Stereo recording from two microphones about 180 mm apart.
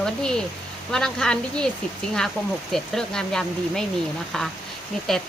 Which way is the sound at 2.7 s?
Centre (ahead or behind).